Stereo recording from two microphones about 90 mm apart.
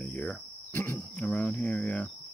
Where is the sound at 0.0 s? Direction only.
15° left (ahead or behind).